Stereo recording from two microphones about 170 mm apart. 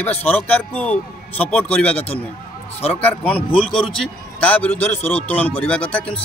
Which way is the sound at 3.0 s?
10° left (ahead or behind).